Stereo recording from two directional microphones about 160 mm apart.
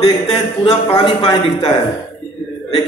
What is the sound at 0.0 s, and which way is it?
Speech, 40° left (ahead or behind).